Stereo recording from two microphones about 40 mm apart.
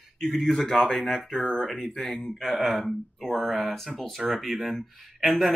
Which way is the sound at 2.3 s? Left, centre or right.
Centre.